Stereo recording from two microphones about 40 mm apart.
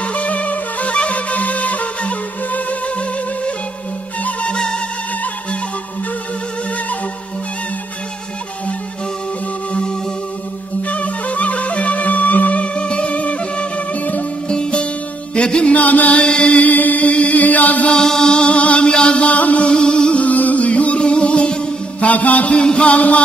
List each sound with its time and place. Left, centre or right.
0.0 s music: left
9.7 s music: left
14.5 s music: left
15.7 s music: left
16.2 s chant: left
16.6 s chant: left
17.9 s music: centre; by 19.7 s left
19.7 s music: left
20.2 s music: left
22.0 s music: left
22.6 s music: left